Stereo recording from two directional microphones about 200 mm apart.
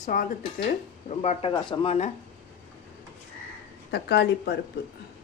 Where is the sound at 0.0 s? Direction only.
40° left (ahead or behind).